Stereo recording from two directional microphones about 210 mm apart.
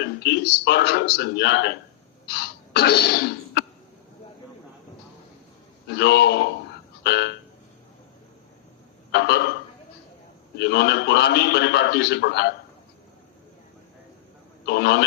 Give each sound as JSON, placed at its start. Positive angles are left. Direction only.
{"t": 0.0, "sound": "a man's voice", "side_deg": 50}
{"t": 2.2, "sound": "throat clearing", "side_deg": 50}
{"t": 5.9, "sound": "a man's voice", "side_deg": 50}
{"t": 9.1, "sound": "a man's voice", "side_deg": 50}
{"t": 10.6, "sound": "a man's voice", "side_deg": 55}
{"t": 14.7, "sound": "a man's voice", "side_deg": 55}